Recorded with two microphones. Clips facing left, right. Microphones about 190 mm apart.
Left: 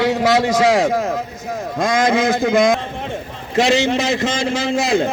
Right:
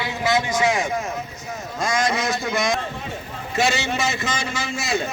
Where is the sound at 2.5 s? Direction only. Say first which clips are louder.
Left 9 dB; 55° left (ahead or behind).